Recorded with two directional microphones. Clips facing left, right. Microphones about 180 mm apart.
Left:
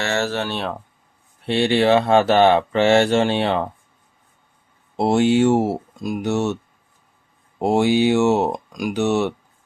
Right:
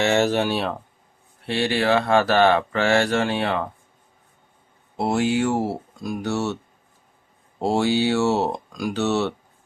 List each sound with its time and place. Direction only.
0.0 s speech: 15° right (ahead or behind)
1.5 s speech: 25° left (ahead or behind)
4.9 s speech: 25° left (ahead or behind)
7.6 s speech: 15° left (ahead or behind)